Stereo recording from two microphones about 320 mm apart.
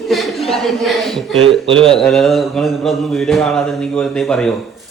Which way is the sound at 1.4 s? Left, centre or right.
Centre.